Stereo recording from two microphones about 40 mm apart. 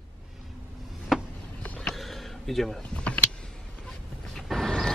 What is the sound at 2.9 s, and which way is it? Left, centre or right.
Vehicle, left.